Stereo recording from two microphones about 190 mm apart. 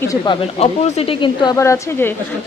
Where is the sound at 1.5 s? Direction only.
15° left (ahead or behind).